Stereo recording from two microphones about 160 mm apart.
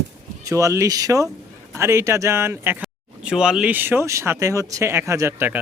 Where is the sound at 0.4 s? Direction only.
20° right (ahead or behind).